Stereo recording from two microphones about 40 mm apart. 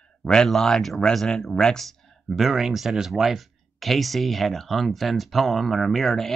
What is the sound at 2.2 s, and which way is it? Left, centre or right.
Speech, centre.